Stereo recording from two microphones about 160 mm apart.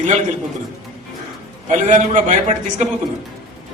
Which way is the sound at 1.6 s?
50° right (ahead or behind).